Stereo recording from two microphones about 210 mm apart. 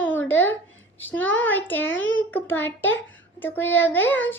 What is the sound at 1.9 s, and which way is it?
Speech, 65° left (ahead or behind).